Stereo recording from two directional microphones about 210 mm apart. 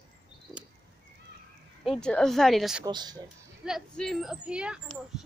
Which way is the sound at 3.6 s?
Centre (ahead or behind).